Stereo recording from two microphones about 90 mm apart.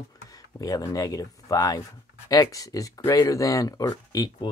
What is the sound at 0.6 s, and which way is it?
Speech, 40° left (ahead or behind).